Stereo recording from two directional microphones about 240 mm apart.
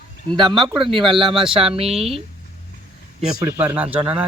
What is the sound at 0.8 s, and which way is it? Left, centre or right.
Speech, right.